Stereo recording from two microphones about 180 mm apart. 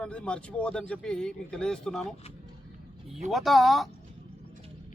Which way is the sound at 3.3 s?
Centre (ahead or behind).